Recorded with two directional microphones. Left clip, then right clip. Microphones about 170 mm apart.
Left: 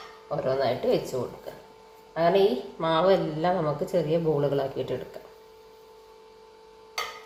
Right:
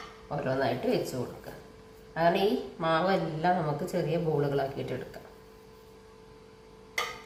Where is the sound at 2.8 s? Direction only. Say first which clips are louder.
Left 5 dB; 25° left (ahead or behind).